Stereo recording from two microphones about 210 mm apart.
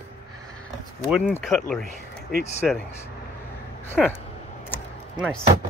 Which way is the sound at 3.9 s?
10° left (ahead or behind).